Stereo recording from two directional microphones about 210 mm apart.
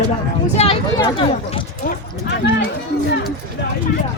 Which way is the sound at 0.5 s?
30° left (ahead or behind).